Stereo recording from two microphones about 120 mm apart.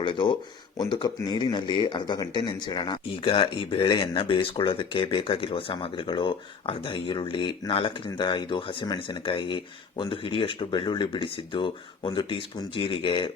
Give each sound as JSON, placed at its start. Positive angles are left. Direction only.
{"t": 0.0, "sound": "speech", "side_deg": 40}